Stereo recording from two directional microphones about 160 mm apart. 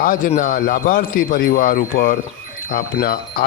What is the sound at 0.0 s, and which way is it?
Speech, 60° left (ahead or behind).